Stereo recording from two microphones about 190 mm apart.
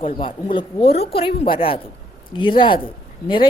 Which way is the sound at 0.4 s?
30° left (ahead or behind).